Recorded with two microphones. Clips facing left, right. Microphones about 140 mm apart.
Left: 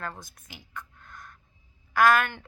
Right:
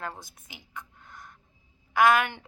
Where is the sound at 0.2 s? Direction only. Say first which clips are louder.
Left 1 dB; 20° right (ahead or behind).